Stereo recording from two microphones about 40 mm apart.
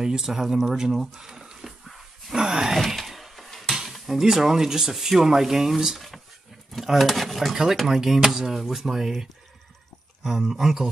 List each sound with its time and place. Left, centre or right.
0.0 s cutlery: centre
0.9 s speech: centre
2.3 s groan: centre
3.0 s a sound: centre
3.7 s cutlery: centre
6.7 s speech: centre
7.7 s cutlery: centre